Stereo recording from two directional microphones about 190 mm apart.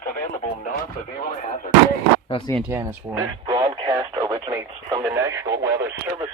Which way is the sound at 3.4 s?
20° right (ahead or behind).